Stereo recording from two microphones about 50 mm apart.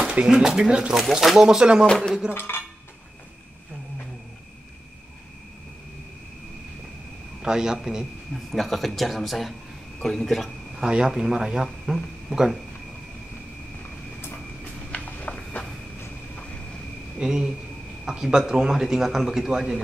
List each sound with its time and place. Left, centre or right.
0.1 s speech: centre
0.9 s speech: centre
1.9 s speech: centre
2.3 s dishes: left
7.4 s speech: centre
8.5 s speech: centre
10.8 s speech: centre
11.1 s speech: centre
14.6 s a sound: left
17.2 s speech: centre